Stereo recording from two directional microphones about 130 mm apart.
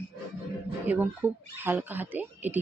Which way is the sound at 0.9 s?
15° right (ahead or behind).